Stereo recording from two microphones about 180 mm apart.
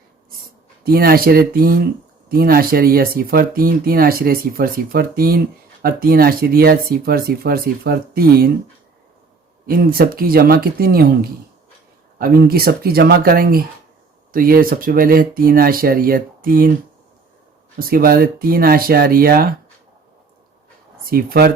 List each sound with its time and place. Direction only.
0.9 s speech: 55° right (ahead or behind)
9.6 s speech: 55° right (ahead or behind)
17.7 s speech: 55° right (ahead or behind)
21.1 s speech: 60° right (ahead or behind)